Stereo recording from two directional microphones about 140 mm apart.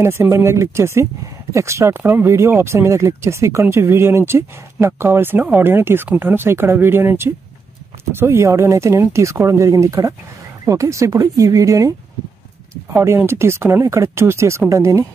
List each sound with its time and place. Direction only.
0.0 s speech: 20° right (ahead or behind)
12.9 s speech: 20° right (ahead or behind)